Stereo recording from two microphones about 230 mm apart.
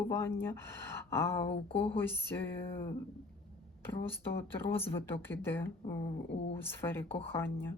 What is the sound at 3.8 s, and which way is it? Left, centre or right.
Speech, centre.